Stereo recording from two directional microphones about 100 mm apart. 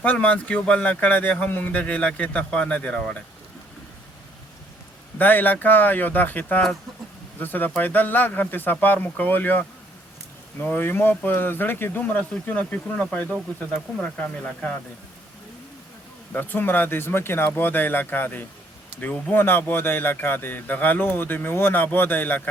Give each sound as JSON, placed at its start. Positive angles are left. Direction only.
{"t": 0.0, "sound": "a man's voice", "side_deg": 15}
{"t": 5.1, "sound": "a man's voice", "side_deg": 20}
{"t": 16.3, "sound": "speech", "side_deg": 20}